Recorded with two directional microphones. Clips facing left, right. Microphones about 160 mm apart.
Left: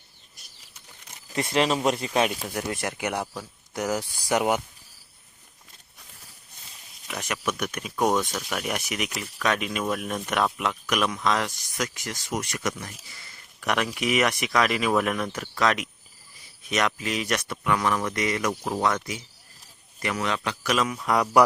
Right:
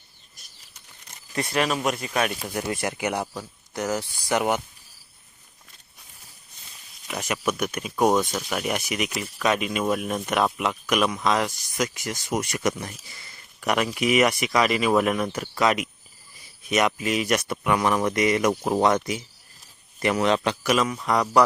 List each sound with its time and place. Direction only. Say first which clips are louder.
1.4 s speech: left 1 dB; 25° left (ahead or behind)
2.3 s speech: right 2 dB; centre (ahead or behind)
3.8 s speech: even; 10° left (ahead or behind)
7.1 s a man's voice: right 3 dB; 5° right (ahead or behind); by 20.6 s 30° right (ahead or behind)
20.7 s speech: right 1 dB; centre (ahead or behind)